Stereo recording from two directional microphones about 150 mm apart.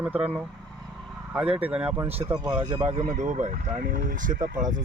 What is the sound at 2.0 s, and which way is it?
Speech, 45° right (ahead or behind).